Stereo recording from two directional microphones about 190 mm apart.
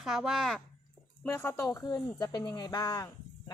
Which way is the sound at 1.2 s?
10° left (ahead or behind).